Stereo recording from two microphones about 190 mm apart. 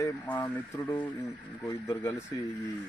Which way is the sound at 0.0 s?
10° left (ahead or behind).